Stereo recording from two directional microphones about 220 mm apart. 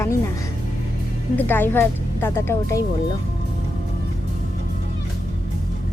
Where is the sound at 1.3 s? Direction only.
10° left (ahead or behind).